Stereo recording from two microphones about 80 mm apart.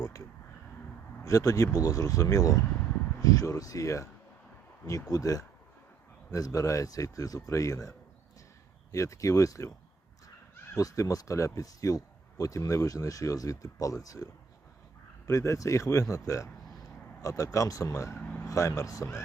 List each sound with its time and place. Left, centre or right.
0.0 s a man's voice: left
5.1 s a man's voice: left
10.8 s a man's voice: left
15.3 s a man's voice: left